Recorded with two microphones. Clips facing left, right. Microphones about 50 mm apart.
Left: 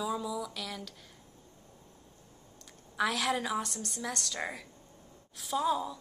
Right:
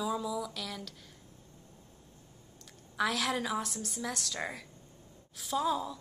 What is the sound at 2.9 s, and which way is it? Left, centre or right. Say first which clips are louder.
A woman's voice: left 1 dB; centre.